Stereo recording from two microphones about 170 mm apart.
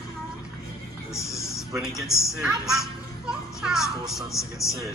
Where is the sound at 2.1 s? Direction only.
Centre (ahead or behind).